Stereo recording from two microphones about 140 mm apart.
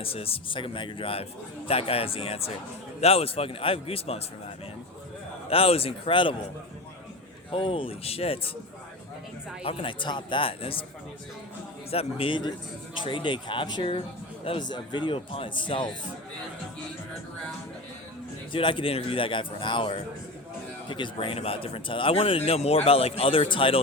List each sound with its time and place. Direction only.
0.0 s a man's voice: 45° left (ahead or behind)
5.5 s a man's voice: 45° left (ahead or behind)
7.5 s speech: 40° left (ahead or behind)
9.6 s speech: 40° left (ahead or behind)
11.9 s a man's voice: 45° left (ahead or behind)
18.5 s speech: 35° left (ahead or behind)